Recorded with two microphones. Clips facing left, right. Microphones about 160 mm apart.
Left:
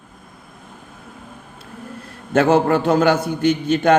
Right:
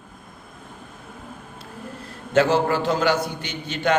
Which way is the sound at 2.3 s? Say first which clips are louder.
Left 4 dB; 55° left (ahead or behind).